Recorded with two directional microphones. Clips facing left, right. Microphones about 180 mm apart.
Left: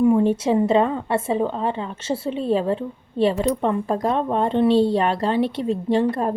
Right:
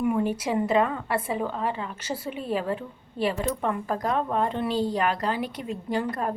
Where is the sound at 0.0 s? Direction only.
25° left (ahead or behind).